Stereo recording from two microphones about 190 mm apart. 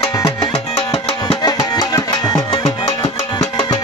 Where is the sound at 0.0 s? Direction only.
25° left (ahead or behind).